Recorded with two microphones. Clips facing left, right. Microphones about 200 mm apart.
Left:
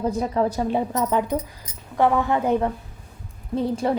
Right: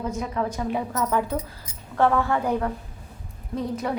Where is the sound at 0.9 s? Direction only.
20° left (ahead or behind).